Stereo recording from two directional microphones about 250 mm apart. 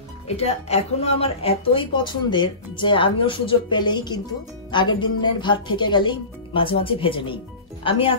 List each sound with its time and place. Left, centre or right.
0.4 s a woman's voice: left